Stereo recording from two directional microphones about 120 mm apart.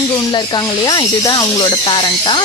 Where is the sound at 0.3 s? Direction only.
35° left (ahead or behind).